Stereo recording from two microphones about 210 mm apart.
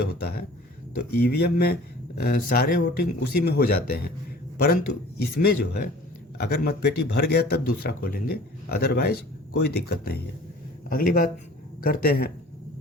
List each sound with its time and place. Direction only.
0.0 s speech: 45° left (ahead or behind)
5.2 s speech: 50° left (ahead or behind)